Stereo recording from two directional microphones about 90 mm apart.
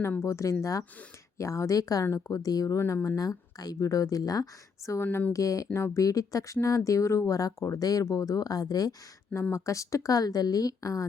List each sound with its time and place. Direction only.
0.2 s speech: 35° left (ahead or behind)
5.0 s speech: 20° left (ahead or behind)
5.3 s speech: 40° left (ahead or behind)